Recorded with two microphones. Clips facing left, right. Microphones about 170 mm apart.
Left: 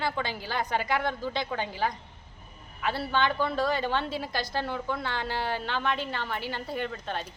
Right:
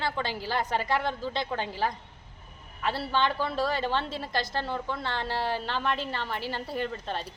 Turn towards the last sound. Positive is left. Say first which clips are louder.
# right 1 dB
turn(degrees=0)  # may be behind; listen again after turning